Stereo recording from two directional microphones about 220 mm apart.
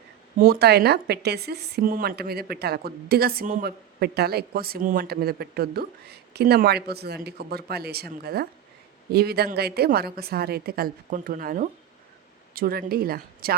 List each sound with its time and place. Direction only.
0.3 s a woman's voice: 40° right (ahead or behind)